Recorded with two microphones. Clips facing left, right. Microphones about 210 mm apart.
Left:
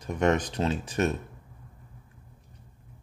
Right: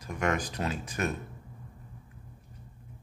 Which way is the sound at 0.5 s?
30° left (ahead or behind).